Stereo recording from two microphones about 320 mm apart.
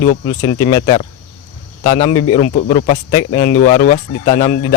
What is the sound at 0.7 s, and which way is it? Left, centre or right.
Speech, centre.